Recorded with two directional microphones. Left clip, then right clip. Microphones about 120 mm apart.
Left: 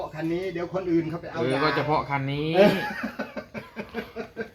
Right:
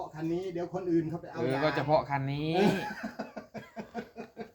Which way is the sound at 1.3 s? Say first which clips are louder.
Left 6 dB; 20° right (ahead or behind).